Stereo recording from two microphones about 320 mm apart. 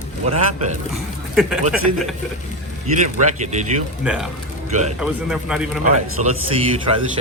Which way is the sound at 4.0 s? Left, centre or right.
Centre.